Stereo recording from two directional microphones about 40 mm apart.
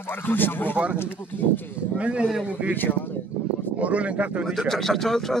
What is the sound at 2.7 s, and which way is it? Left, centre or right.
Speech, left.